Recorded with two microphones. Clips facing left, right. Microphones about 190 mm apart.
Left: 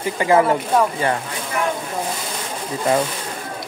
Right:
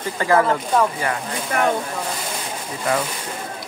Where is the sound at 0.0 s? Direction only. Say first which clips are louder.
Left 2 dB; 15° left (ahead or behind).